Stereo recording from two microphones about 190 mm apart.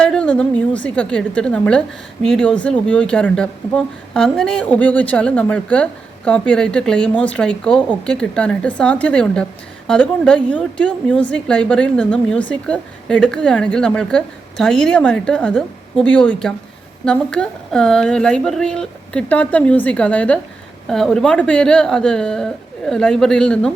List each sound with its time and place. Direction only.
0.0 s a woman's voice: 5° left (ahead or behind)